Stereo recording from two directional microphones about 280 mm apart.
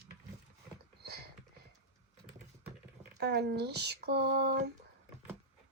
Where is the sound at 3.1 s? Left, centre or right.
Right.